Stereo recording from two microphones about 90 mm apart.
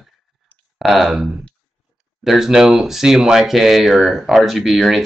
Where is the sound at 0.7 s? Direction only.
Centre (ahead or behind).